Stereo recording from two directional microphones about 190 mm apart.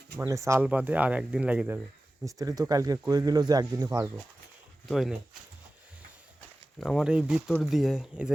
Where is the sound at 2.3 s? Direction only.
20° right (ahead or behind).